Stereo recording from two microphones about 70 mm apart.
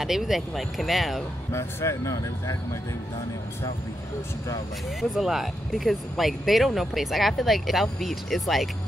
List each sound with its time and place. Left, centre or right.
0.0 s speech: centre
1.5 s speech: left
5.1 s speech: centre